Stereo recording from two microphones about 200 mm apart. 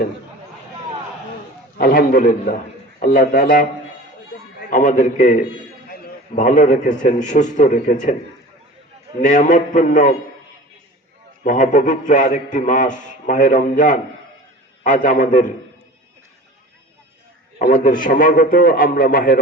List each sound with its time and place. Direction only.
1.8 s a man's voice: 45° left (ahead or behind)
4.7 s a man's voice: 40° left (ahead or behind)
9.2 s a man's voice: 40° left (ahead or behind)
11.4 s a man's voice: 40° left (ahead or behind)
17.6 s a man's voice: 45° left (ahead or behind)